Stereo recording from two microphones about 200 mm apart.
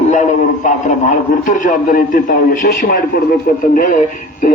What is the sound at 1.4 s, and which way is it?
A man's voice, 40° left (ahead or behind).